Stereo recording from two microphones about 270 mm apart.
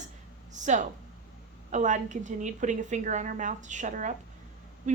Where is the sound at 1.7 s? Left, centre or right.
Right.